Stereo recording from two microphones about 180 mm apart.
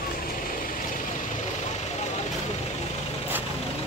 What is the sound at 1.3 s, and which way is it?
Vehicle, 40° left (ahead or behind).